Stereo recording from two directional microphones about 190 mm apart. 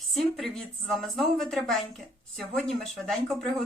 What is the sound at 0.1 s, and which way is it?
A woman's voice, centre (ahead or behind).